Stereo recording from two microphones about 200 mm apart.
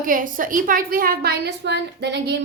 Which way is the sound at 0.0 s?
45° right (ahead or behind).